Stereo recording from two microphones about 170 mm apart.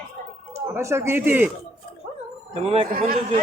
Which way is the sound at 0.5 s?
15° right (ahead or behind).